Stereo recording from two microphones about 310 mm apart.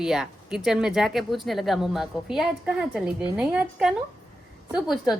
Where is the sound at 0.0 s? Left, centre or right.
Centre.